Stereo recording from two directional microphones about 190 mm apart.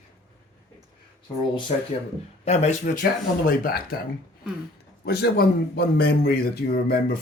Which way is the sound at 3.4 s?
50° left (ahead or behind).